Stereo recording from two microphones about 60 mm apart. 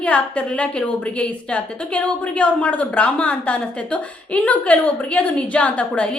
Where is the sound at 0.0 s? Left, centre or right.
Left.